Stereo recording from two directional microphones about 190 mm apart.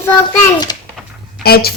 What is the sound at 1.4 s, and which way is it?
Speech, 55° left (ahead or behind).